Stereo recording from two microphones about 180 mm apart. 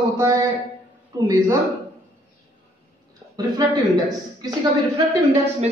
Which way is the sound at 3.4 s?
20° right (ahead or behind).